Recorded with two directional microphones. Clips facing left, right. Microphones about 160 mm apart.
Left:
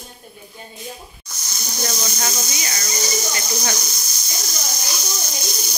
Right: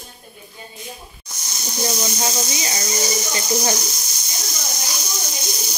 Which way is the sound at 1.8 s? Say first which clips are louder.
Right 3 dB; 25° right (ahead or behind).